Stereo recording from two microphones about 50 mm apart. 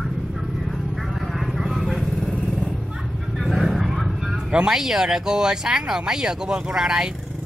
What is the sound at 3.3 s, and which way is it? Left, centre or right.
Vehicle, centre.